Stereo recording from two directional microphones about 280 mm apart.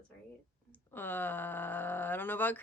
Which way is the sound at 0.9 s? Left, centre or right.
Centre.